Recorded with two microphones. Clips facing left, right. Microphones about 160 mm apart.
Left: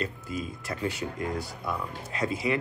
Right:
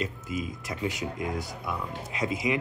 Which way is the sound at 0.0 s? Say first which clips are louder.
Right 1 dB; 15° right (ahead or behind).